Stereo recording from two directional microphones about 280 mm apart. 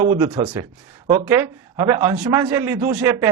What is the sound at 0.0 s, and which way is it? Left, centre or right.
A man's voice, right.